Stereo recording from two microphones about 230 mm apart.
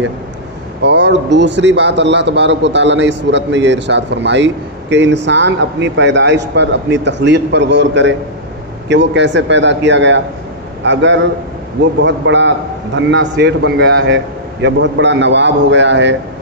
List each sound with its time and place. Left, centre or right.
0.8 s a man's voice: right